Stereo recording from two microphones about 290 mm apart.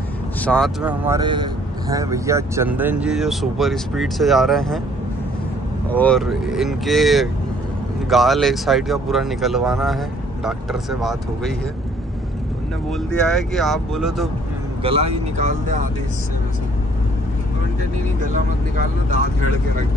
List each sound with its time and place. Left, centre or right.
0.4 s speech: centre
5.9 s speech: centre
12.9 s speech: centre
14.8 s speech: centre